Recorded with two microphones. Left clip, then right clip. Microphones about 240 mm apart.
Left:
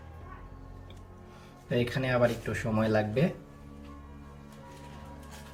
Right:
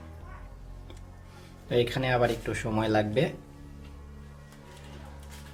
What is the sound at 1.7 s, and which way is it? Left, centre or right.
Speech, right.